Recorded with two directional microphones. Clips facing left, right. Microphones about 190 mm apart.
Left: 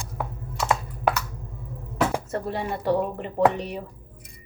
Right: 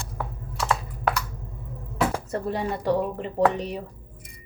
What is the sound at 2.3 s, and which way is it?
A woman's voice, 40° right (ahead or behind).